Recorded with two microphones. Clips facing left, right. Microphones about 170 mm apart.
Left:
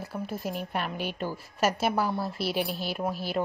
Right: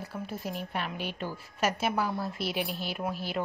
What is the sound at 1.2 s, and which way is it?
A woman's voice, 40° left (ahead or behind).